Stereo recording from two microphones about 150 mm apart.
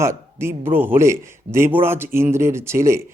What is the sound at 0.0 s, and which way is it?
Speech, 20° right (ahead or behind).